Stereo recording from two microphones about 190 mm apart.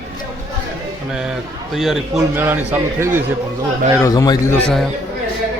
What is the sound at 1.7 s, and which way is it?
Speech, centre (ahead or behind).